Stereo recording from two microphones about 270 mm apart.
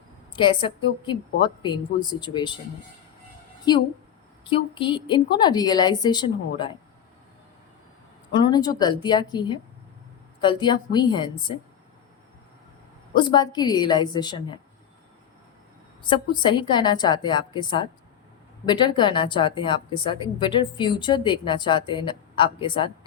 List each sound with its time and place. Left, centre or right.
0.3 s speech: centre
3.7 s speech: centre
8.3 s speech: centre
13.1 s speech: centre
16.0 s speech: centre